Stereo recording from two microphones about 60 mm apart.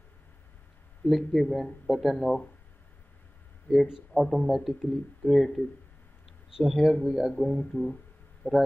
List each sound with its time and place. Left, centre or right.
1.0 s a man's voice: centre
4.1 s a man's voice: centre
8.4 s speech: left